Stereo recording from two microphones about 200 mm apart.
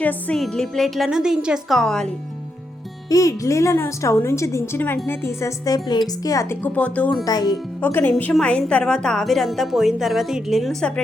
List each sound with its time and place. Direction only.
0.0 s a woman's voice: 5° left (ahead or behind)
3.1 s a woman's voice: 15° left (ahead or behind)
7.3 s a woman's voice: 20° left (ahead or behind); by 11.0 s 5° left (ahead or behind)